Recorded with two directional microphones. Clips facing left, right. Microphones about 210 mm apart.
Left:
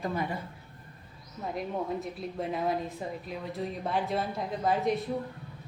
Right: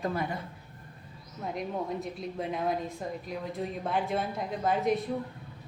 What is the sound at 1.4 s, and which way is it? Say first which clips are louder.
A woman's voice: even; centre (ahead or behind).